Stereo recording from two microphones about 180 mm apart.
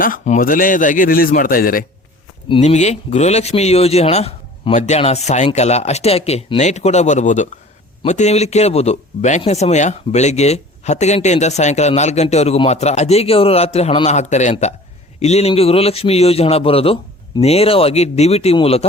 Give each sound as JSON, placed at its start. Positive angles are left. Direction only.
{"t": 0.0, "sound": "speech", "side_deg": 50}
{"t": 2.5, "sound": "speech", "side_deg": 40}